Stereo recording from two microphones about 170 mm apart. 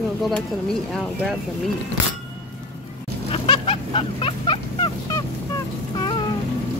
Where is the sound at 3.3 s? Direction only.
35° left (ahead or behind).